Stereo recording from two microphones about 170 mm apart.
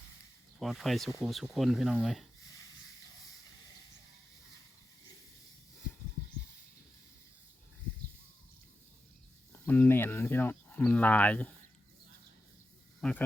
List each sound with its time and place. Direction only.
0.6 s speech: centre (ahead or behind)
9.5 s a sound: 10° left (ahead or behind)
13.0 s speech: 5° left (ahead or behind)